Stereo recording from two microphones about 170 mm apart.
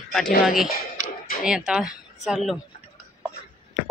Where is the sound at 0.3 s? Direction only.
60° left (ahead or behind).